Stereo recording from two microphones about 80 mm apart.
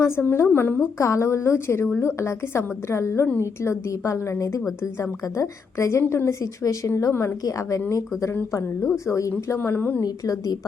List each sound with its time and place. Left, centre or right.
0.0 s a woman's voice: left
0.9 s a woman's voice: left
6.4 s a woman's voice: left
9.5 s a woman's voice: left
10.0 s a woman's voice: left